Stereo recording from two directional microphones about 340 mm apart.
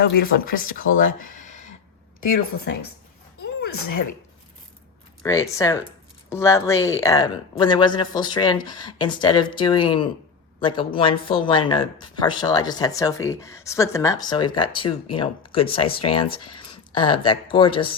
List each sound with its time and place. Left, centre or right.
0.0 s speech: left
1.2 s a sound: left
3.6 s speech: left
5.2 s speech: centre